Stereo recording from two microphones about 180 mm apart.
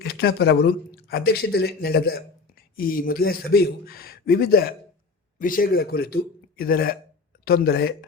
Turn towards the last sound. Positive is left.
turn(degrees=60)  # may be behind; listen again after turning